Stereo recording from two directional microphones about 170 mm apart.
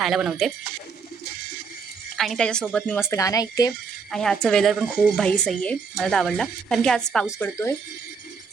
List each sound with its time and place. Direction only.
0.0 s speech: centre (ahead or behind)
2.1 s speech: centre (ahead or behind); by 3.7 s 20° left (ahead or behind)
4.1 s speech: centre (ahead or behind)
7.3 s speech: 15° left (ahead or behind)